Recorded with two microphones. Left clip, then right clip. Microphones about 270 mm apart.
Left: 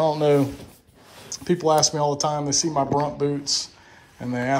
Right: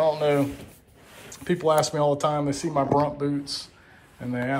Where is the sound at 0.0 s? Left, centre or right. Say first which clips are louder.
Left 2 dB; left.